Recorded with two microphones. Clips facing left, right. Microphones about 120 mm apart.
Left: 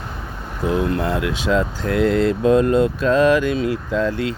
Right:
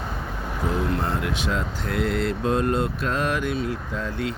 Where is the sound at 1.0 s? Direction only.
90° left.